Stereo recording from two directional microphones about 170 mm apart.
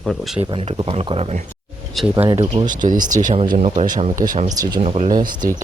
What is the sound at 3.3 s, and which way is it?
Speech, 35° right (ahead or behind).